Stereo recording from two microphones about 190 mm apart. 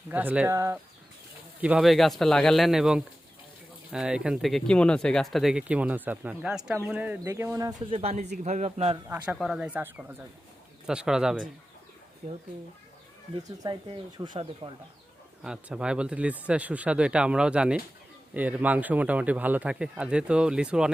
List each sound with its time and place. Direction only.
0.1 s speech: 10° right (ahead or behind)
1.6 s speech: 5° right (ahead or behind); by 7.9 s 20° right (ahead or behind)
7.9 s a man's voice: 35° right (ahead or behind)
9.0 s speech: 5° right (ahead or behind)
14.2 s speech: 25° right (ahead or behind)
15.4 s speech: 5° right (ahead or behind)